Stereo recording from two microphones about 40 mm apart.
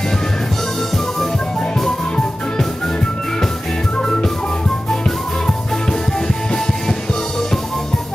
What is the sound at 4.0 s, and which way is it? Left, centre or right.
Music, centre.